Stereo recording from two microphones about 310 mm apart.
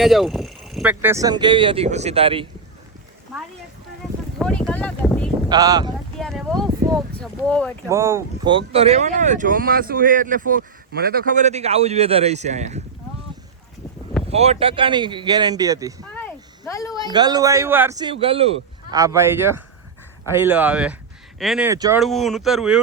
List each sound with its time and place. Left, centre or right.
0.0 s speech: centre
4.4 s a sound: centre
5.5 s speech: centre
6.1 s a sound: centre
7.2 s speech: centre
7.9 s speech: centre
14.3 s speech: centre
16.2 s a sound: centre
17.1 s speech: centre
22.0 s speech: centre